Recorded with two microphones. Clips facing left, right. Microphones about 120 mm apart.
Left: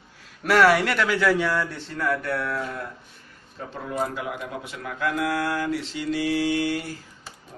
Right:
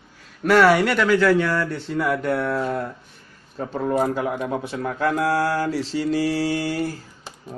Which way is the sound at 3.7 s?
45° right (ahead or behind).